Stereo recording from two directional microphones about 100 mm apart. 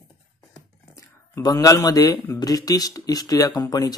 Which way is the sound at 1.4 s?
40° left (ahead or behind).